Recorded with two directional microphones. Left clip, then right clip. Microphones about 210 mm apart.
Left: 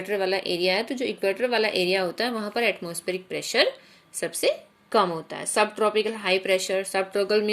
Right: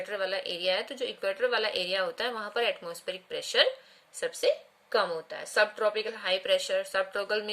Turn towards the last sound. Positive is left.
turn(degrees=-5)  # may be behind; listen again after turning